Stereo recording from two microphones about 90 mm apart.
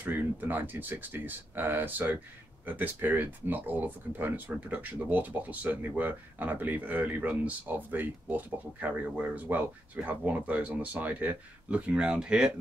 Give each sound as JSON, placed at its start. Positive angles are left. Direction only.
{"t": 0.0, "sound": "speech", "side_deg": -20}